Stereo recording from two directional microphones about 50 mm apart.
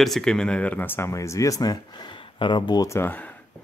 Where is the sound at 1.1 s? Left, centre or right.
Left.